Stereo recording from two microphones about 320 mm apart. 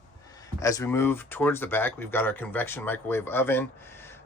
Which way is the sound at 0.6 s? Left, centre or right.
Centre.